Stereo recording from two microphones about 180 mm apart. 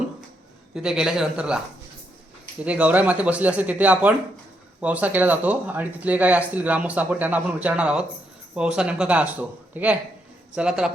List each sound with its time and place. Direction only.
0.7 s a man's voice: 5° right (ahead or behind)
2.6 s a man's voice: 5° right (ahead or behind)